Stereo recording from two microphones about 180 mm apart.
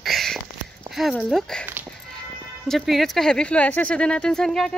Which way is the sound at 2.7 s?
Centre (ahead or behind).